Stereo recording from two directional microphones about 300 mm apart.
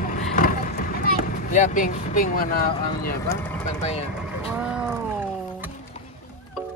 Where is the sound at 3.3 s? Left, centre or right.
Centre.